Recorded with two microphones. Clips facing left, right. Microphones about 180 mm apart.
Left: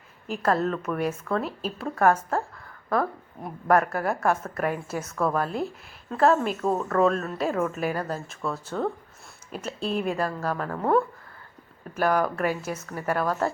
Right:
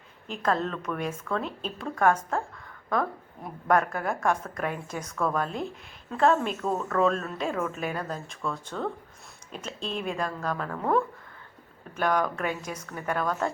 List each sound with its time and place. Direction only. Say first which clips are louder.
0.3 s a woman's voice: left 3 dB; 5° left (ahead or behind)